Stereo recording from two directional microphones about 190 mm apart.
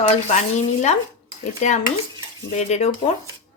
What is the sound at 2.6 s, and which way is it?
Speech, 35° left (ahead or behind).